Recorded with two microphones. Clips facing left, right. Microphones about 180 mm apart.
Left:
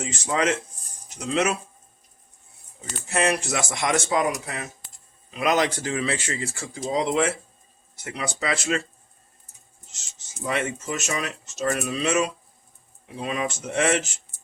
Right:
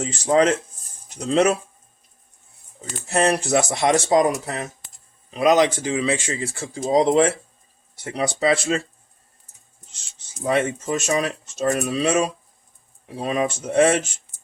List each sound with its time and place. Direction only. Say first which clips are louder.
0.0 s speech: right 7 dB; 35° right (ahead or behind)
3.1 s speech: right 5 dB; 35° right (ahead or behind)
5.4 s speech: right 6 dB; 20° right (ahead or behind)
6.9 s speech: right 7 dB; 40° right (ahead or behind)
10.5 s speech: right 6 dB; 35° right (ahead or behind)